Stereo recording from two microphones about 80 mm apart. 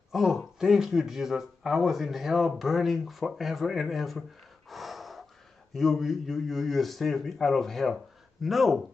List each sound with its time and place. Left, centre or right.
0.1 s speech: centre
4.6 s snort: centre
5.7 s speech: centre